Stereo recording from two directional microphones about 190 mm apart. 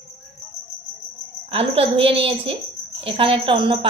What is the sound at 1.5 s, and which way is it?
A woman's voice, 30° right (ahead or behind).